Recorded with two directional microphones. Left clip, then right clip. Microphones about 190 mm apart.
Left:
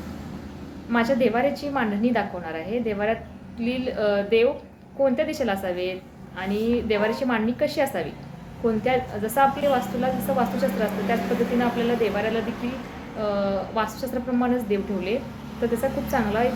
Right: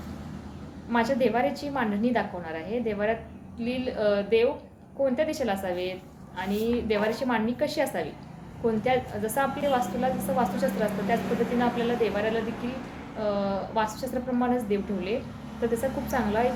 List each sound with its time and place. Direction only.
0.9 s a woman's voice: centre (ahead or behind)